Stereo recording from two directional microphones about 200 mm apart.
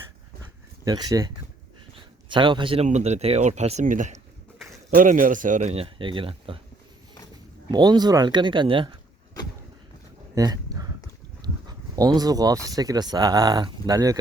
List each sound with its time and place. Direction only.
0.9 s speech: 20° right (ahead or behind)
2.3 s speech: 25° right (ahead or behind)
7.7 s speech: 20° right (ahead or behind)
10.3 s a sound: 20° right (ahead or behind)
11.4 s speech: 20° right (ahead or behind)